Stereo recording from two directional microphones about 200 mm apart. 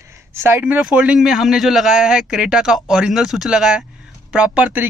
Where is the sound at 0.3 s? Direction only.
10° right (ahead or behind).